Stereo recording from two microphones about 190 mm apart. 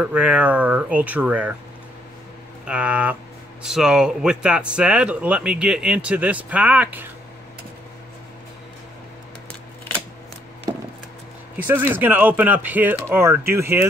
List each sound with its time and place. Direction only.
0.0 s speech: 5° right (ahead or behind)
2.6 s speech: 5° right (ahead or behind)
10.7 s a sound: 20° right (ahead or behind)
11.5 s speech: 10° right (ahead or behind)